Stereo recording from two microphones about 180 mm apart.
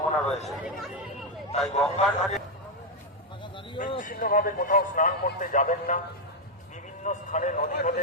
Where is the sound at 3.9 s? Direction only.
50° left (ahead or behind).